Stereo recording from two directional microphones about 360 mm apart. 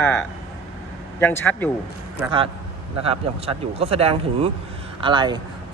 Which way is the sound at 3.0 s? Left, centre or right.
Centre.